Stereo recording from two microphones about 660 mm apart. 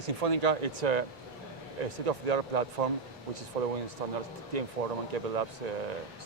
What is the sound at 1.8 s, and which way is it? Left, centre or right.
A man's voice, right.